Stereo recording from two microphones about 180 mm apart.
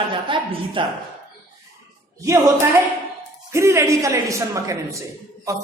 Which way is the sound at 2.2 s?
15° right (ahead or behind).